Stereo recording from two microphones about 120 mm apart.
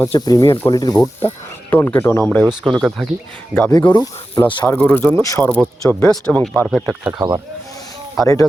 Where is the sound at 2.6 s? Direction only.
Centre (ahead or behind).